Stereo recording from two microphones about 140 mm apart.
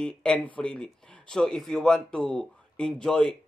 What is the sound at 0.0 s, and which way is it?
Speech, 5° left (ahead or behind).